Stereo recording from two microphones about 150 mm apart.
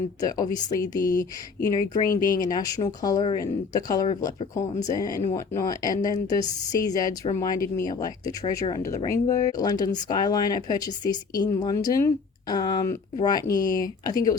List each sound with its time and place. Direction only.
0.2 s speech: 25° left (ahead or behind)